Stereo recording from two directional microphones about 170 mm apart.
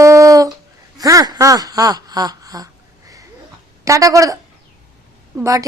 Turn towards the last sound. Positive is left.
turn(degrees=-20)  # may be behind; listen again after turning